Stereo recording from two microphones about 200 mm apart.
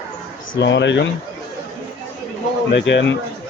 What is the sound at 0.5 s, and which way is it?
Speech, 60° left (ahead or behind).